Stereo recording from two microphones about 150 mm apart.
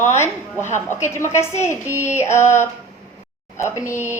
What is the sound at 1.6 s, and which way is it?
A woman's voice, 20° left (ahead or behind).